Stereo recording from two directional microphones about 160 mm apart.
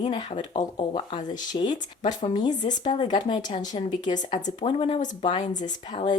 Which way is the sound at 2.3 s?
25° left (ahead or behind).